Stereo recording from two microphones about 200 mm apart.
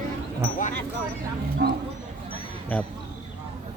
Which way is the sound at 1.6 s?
50° right (ahead or behind).